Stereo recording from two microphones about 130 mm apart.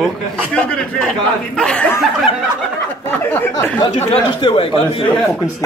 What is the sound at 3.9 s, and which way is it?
Speech, 60° left (ahead or behind).